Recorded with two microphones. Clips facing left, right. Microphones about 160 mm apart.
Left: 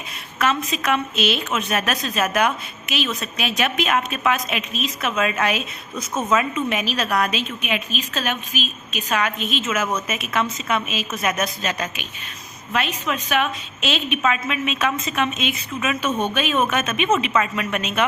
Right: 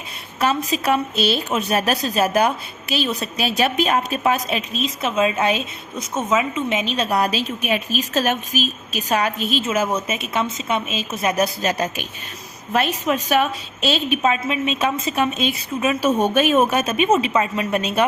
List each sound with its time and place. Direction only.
0.3 s a woman's voice: 35° right (ahead or behind)